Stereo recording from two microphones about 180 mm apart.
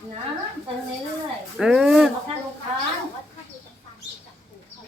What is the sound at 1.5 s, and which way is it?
Speech, 5° right (ahead or behind).